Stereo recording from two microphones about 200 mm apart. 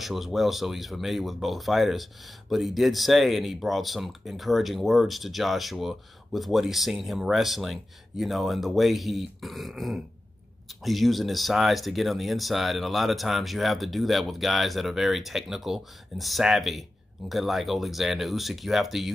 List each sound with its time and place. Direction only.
0.0 s speech: centre (ahead or behind)